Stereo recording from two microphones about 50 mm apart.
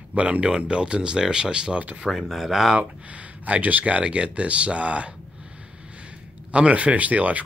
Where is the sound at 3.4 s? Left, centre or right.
Right.